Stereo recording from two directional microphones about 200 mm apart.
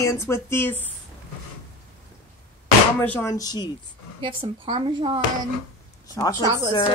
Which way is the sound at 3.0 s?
10° left (ahead or behind).